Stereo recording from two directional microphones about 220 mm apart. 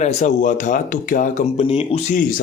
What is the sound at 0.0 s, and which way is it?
Speech, 30° left (ahead or behind).